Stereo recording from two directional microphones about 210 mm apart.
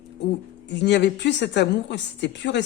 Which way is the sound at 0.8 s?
55° left (ahead or behind).